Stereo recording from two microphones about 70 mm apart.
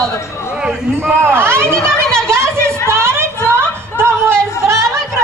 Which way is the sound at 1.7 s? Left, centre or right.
Centre.